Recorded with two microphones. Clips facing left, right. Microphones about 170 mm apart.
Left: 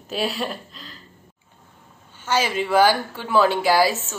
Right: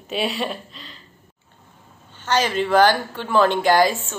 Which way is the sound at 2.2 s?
10° left (ahead or behind).